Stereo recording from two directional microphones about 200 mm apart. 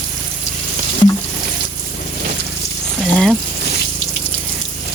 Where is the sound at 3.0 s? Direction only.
5° right (ahead or behind).